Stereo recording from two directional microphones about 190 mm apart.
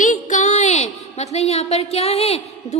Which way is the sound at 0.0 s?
40° left (ahead or behind).